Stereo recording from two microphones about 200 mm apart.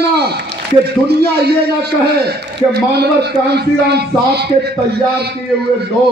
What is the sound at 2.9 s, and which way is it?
A man's voice, 55° right (ahead or behind).